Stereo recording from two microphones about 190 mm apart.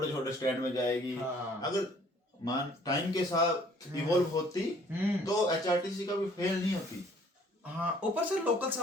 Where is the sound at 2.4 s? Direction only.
20° left (ahead or behind).